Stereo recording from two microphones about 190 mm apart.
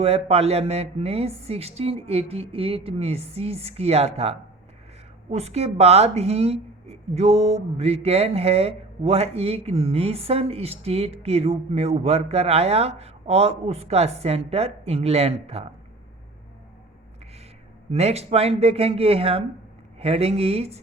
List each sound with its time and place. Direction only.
0.0 s speech: 30° right (ahead or behind)
17.9 s speech: 35° right (ahead or behind)